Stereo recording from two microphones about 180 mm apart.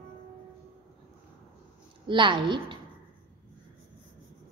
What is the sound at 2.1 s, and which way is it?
Speech, 25° right (ahead or behind).